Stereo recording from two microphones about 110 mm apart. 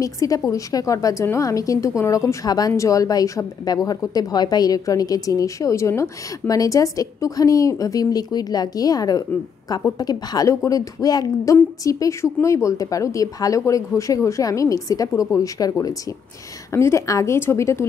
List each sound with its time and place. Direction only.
0.0 s a woman's voice: 30° left (ahead or behind)